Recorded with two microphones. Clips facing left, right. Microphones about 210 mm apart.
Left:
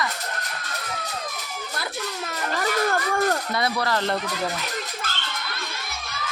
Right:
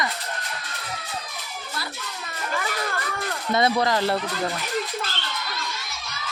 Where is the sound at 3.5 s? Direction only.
20° right (ahead or behind).